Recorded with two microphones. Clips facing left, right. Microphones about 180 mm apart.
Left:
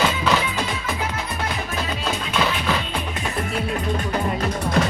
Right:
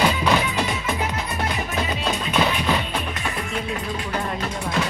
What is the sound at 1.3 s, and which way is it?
Music, centre (ahead or behind).